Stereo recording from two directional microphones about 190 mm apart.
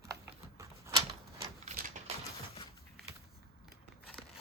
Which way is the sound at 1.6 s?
40° right (ahead or behind).